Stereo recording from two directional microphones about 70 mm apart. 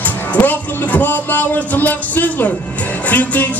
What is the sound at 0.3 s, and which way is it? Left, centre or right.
Speech, left.